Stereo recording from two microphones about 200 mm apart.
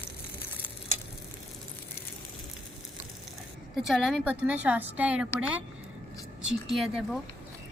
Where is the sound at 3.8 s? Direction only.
Centre (ahead or behind).